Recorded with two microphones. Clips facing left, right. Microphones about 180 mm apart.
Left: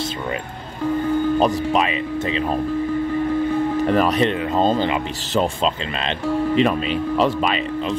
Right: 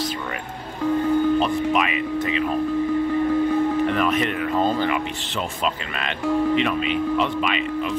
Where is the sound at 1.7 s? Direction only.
30° left (ahead or behind).